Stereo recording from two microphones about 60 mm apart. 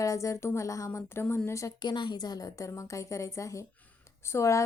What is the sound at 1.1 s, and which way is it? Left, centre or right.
Speech, left.